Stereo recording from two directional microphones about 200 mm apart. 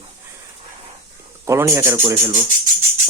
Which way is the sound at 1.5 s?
15° right (ahead or behind).